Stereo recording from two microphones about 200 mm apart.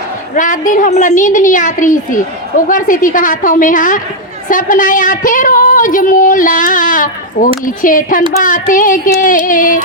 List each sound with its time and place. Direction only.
0.3 s a woman's voice: 40° left (ahead or behind)
7.6 s a sound: 40° left (ahead or behind)
9.2 s a woman's voice: 40° left (ahead or behind)